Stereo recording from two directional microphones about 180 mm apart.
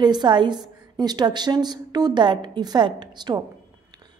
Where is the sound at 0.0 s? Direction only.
25° right (ahead or behind).